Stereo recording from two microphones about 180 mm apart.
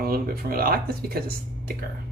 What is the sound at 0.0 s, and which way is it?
Speech, 60° right (ahead or behind).